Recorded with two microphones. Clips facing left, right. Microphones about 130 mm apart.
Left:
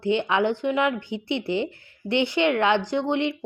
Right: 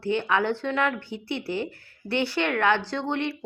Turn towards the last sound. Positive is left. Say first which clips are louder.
# left 4 dB
turn(degrees=20)  # may be behind; listen again after turning